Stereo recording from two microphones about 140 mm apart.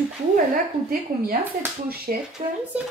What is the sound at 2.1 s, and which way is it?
Speech, 80° right.